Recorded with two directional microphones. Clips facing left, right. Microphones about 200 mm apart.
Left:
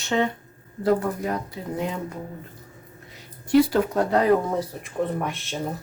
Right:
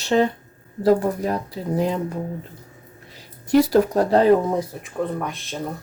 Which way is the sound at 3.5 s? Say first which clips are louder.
Right 3 dB; 40° right (ahead or behind).